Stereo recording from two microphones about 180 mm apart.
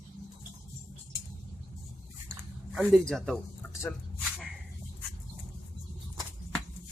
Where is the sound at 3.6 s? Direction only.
10° left (ahead or behind).